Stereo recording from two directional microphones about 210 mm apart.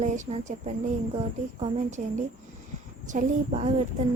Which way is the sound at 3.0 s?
35° right (ahead or behind).